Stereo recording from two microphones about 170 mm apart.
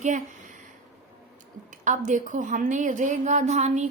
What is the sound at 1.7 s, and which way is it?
A woman's voice, 45° right (ahead or behind).